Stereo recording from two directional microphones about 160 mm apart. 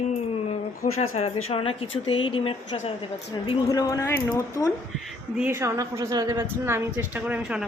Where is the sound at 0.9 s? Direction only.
40° left (ahead or behind); by 4.7 s 20° left (ahead or behind).